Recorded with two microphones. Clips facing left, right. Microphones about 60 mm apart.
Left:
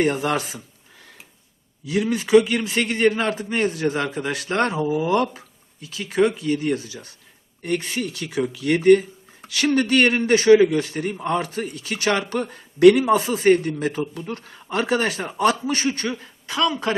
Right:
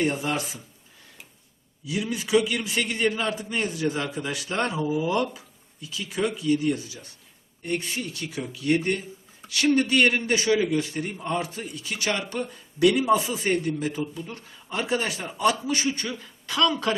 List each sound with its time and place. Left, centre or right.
0.0 s speech: left
1.8 s a man's voice: left
2.2 s a man's voice: left
9.9 s a man's voice: left
10.3 s a man's voice: left
16.1 s speech: left
16.6 s speech: centre